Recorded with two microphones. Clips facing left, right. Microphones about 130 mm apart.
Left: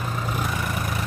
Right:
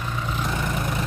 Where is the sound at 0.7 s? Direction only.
25° right (ahead or behind).